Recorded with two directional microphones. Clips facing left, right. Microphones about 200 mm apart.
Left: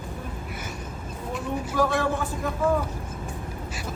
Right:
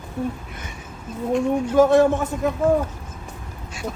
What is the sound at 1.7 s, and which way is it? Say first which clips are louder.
Speech: right 9 dB; 25° right (ahead or behind).